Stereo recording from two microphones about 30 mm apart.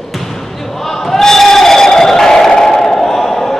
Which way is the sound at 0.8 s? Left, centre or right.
Centre.